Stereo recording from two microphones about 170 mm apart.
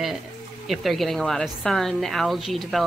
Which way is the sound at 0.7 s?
Centre (ahead or behind).